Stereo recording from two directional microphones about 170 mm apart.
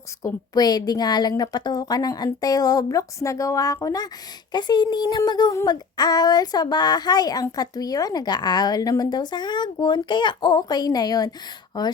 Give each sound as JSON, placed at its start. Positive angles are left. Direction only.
{"t": 0.2, "sound": "speech", "side_deg": 20}